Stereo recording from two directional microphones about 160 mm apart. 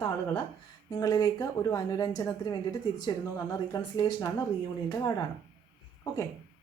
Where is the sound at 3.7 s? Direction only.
25° left (ahead or behind).